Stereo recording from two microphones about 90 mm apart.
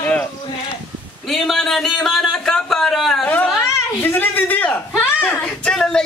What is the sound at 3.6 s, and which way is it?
A child's voice, 25° left (ahead or behind).